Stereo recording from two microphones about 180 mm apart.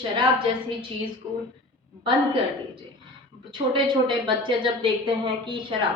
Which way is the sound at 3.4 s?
25° right (ahead or behind).